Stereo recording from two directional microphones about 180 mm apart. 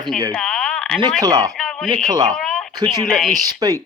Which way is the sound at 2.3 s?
5° left (ahead or behind).